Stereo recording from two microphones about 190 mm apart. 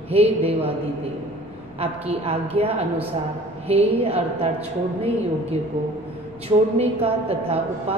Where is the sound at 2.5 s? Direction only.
30° right (ahead or behind).